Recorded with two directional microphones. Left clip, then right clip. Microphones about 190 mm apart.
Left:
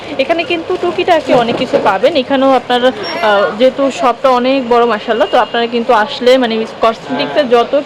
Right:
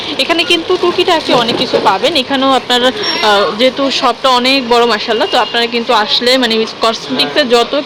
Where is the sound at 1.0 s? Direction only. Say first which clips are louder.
Left 4 dB; 20° left (ahead or behind).